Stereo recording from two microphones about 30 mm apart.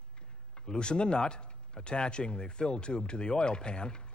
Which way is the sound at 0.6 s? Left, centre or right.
Left.